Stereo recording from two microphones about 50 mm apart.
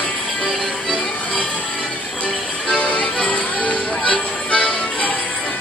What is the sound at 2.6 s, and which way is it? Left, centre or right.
Music, left.